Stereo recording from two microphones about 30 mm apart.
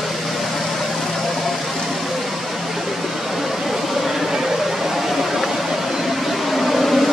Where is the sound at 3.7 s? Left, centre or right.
Centre.